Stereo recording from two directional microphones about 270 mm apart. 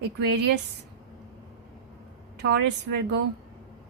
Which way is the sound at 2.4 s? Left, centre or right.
Right.